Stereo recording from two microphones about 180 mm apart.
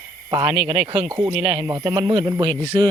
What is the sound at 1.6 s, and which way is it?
Speech, 20° right (ahead or behind).